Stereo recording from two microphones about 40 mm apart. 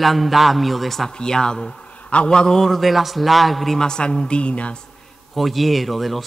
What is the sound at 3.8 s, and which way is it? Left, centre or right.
Speech, centre.